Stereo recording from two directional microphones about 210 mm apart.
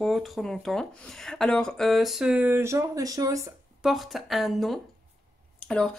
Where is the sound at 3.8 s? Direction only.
Centre (ahead or behind).